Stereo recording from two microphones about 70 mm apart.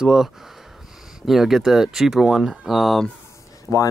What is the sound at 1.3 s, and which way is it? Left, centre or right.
Speech, centre.